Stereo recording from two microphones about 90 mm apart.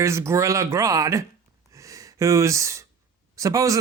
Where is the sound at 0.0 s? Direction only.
30° right (ahead or behind).